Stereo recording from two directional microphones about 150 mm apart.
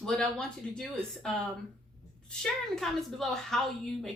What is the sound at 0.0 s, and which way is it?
A woman's voice, 5° left (ahead or behind).